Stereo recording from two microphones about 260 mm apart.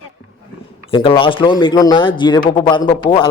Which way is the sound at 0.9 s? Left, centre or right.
Centre.